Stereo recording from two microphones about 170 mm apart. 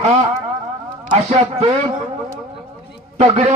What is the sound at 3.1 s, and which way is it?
Speech, 40° right (ahead or behind).